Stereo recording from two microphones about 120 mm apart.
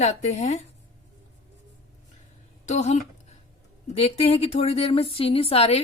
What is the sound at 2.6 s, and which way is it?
Speech, 75° left (ahead or behind).